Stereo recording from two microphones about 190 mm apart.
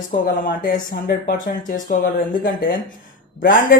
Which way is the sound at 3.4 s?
45° left (ahead or behind).